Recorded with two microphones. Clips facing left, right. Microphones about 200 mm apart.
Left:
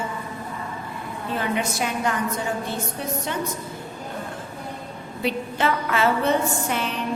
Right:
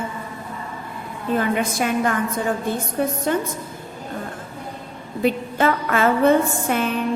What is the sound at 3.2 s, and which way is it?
Speech, 50° right (ahead or behind).